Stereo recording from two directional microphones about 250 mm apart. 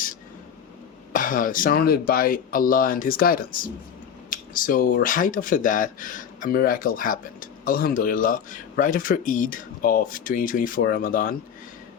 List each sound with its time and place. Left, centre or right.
1.1 s speech: left